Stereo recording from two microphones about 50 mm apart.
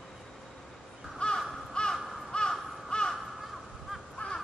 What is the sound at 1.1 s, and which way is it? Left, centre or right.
Crow, centre.